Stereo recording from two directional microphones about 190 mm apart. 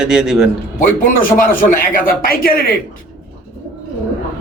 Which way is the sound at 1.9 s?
50° left (ahead or behind).